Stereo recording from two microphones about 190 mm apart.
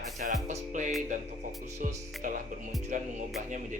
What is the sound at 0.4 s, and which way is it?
Music, 40° right (ahead or behind).